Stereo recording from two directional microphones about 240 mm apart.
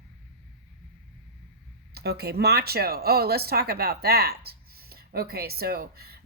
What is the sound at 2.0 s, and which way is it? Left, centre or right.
Speech, right.